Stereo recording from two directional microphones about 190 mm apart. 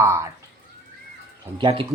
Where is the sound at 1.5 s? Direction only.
25° right (ahead or behind).